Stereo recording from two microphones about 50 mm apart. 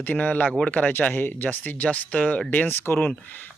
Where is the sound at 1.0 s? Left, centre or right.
Left.